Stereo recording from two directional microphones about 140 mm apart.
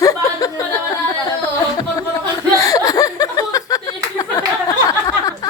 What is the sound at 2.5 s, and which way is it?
Chuckle, 25° left (ahead or behind).